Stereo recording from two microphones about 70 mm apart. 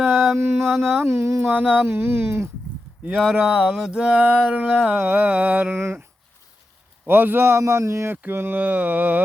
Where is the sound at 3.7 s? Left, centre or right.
Centre.